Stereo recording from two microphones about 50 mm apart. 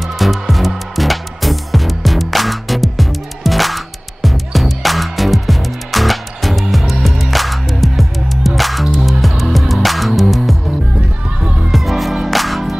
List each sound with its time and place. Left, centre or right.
0.0 s music: centre
11.0 s music: centre
11.7 s music: centre